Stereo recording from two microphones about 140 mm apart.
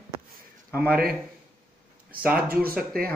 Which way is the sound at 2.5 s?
90° right.